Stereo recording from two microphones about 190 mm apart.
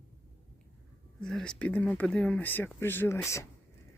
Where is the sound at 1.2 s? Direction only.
5° left (ahead or behind).